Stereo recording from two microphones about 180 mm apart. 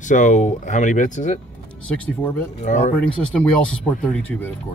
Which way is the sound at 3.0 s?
5° left (ahead or behind).